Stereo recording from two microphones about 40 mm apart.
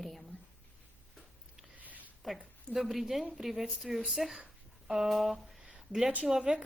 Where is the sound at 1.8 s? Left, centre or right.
Right.